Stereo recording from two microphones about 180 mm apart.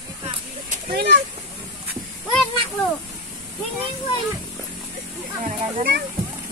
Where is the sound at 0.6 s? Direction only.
50° right (ahead or behind).